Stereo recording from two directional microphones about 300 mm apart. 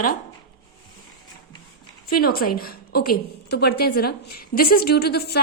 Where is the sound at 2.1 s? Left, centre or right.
Left.